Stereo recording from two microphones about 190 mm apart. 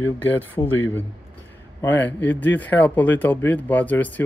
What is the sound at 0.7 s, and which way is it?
Speech, 10° left (ahead or behind).